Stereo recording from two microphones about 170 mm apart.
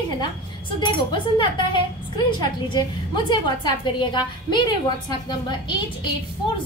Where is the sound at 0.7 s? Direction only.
25° left (ahead or behind).